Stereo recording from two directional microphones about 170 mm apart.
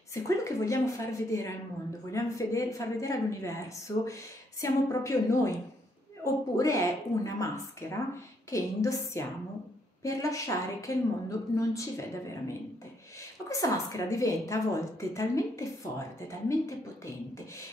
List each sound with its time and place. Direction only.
0.1 s a woman's voice: 15° left (ahead or behind)
13.5 s a woman's voice: 20° left (ahead or behind)